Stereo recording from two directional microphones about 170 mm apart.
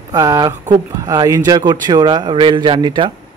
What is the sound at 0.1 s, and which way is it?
Speech, 20° right (ahead or behind).